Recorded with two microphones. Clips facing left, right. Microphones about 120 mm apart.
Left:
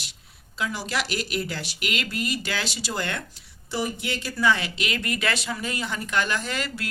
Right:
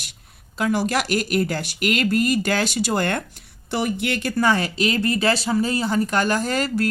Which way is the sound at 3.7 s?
65° right (ahead or behind).